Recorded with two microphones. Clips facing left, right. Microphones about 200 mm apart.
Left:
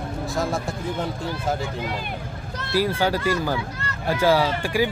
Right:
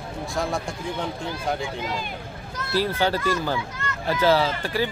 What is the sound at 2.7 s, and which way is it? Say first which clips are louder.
Speech: left 1 dB; 10° left (ahead or behind).